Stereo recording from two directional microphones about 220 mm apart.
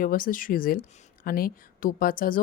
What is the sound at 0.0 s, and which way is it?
Speech, 40° left (ahead or behind).